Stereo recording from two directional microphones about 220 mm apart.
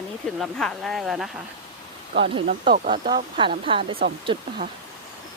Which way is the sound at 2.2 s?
25° right (ahead or behind).